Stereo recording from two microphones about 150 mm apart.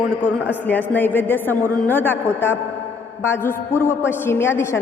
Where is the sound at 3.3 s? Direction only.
15° left (ahead or behind).